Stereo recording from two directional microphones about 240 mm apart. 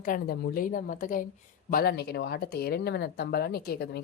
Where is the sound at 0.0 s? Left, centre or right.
Left.